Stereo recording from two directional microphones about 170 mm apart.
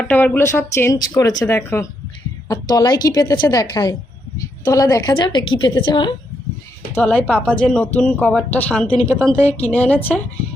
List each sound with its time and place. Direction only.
0.0 s a woman's voice: 10° left (ahead or behind); by 6.1 s 25° left (ahead or behind)
6.9 s speech: 10° left (ahead or behind)